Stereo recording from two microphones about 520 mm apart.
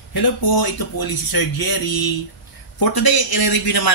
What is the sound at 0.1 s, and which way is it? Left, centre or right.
A man's voice, left.